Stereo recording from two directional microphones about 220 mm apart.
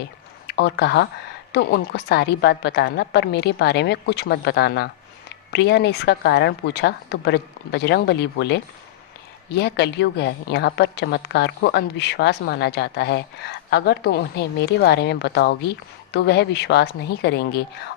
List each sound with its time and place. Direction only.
0.4 s a woman's voice: 50° left (ahead or behind)